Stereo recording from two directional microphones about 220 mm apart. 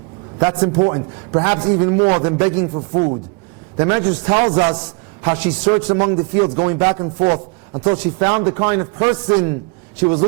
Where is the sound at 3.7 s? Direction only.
15° right (ahead or behind).